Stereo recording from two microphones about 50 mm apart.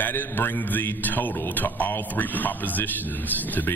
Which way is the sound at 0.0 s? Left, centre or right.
Left.